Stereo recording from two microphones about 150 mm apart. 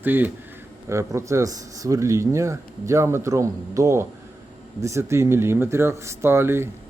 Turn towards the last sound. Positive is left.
turn(degrees=-15)  # may be behind; listen again after turning